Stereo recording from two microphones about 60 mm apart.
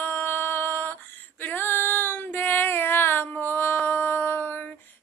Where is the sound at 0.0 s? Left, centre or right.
Left.